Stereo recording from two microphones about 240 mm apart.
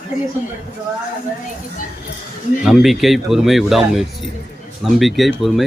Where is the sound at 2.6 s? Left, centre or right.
Centre.